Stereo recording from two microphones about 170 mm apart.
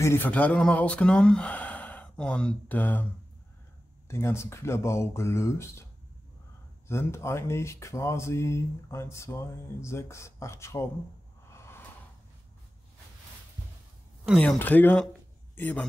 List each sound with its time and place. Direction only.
0.0 s speech: 15° left (ahead or behind)
4.1 s speech: 15° left (ahead or behind)
6.9 s speech: 15° left (ahead or behind)
11.5 s a sound: 15° left (ahead or behind)
14.2 s speech: centre (ahead or behind)
14.6 s a man's voice: 10° left (ahead or behind)